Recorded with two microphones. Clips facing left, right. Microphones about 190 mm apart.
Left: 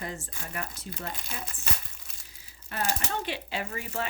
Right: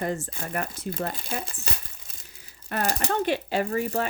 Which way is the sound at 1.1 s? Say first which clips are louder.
Right 5 dB; 30° right (ahead or behind).